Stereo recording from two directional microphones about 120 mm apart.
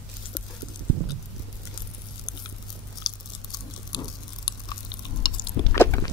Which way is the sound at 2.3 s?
35° left (ahead or behind).